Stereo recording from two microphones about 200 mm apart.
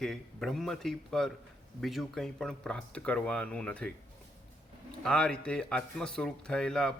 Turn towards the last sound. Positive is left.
turn(degrees=5)  # may be behind; listen again after turning